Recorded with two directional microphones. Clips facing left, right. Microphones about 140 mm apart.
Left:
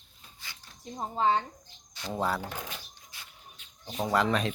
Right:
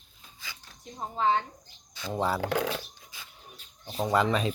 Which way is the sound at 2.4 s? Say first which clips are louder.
Right 11 dB; 85° right.